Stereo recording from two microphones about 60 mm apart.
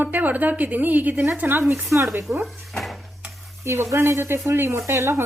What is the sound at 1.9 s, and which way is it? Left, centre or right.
Speech, right.